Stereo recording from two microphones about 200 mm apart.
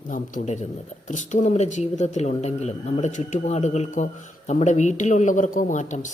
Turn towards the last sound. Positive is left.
turn(degrees=40)  # may be behind; listen again after turning